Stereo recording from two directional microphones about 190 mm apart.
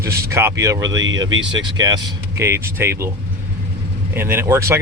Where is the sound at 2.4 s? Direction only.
15° right (ahead or behind).